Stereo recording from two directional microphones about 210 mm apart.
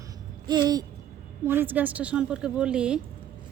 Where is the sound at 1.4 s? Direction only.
10° right (ahead or behind).